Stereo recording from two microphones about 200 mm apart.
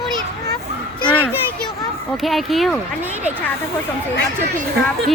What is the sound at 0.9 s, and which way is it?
A child's voice, 5° left (ahead or behind).